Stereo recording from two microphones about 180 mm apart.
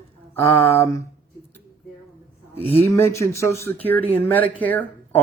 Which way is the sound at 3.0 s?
15° left (ahead or behind).